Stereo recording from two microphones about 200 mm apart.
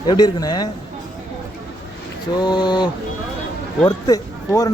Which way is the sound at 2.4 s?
20° left (ahead or behind).